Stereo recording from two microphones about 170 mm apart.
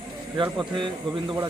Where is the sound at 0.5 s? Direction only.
30° right (ahead or behind).